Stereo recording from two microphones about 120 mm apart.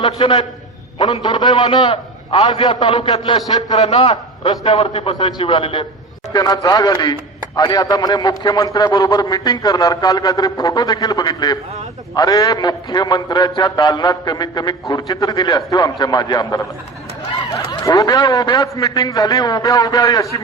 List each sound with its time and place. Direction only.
0.0 s a man's voice: 45° left (ahead or behind)
3.8 s a man's voice: 55° left (ahead or behind)
6.3 s a man's voice: 35° left (ahead or behind)